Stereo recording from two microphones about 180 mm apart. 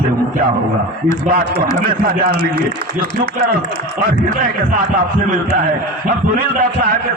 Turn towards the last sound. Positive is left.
turn(degrees=-55)  # may be behind; listen again after turning